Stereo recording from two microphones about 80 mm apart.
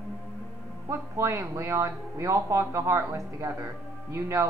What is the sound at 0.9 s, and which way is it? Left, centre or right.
Speech, right.